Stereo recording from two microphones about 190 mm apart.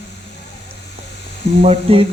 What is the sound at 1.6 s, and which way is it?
Frying, 30° right (ahead or behind).